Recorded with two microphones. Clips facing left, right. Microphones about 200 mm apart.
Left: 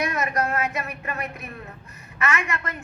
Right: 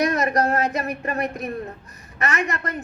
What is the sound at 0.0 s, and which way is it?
A man's voice, 35° right (ahead or behind).